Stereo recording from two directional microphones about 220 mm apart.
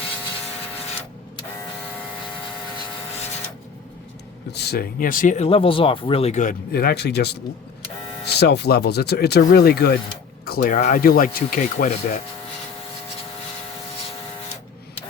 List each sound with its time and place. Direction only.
4.5 s speech: 50° left (ahead or behind)